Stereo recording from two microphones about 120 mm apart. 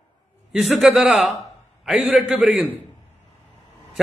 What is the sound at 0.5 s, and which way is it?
A man's voice, centre (ahead or behind).